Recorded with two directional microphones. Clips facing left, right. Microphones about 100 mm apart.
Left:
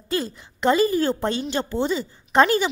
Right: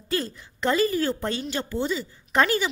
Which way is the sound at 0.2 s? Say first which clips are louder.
Left 4 dB; 20° left (ahead or behind).